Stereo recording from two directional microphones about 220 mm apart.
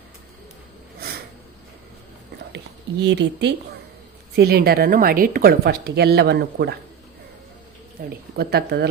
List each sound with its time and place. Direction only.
3.0 s a woman's voice: 50° right (ahead or behind)
8.0 s a woman's voice: 40° right (ahead or behind)